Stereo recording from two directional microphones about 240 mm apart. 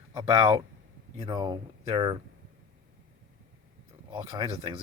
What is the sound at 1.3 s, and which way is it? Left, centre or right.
Speech, centre.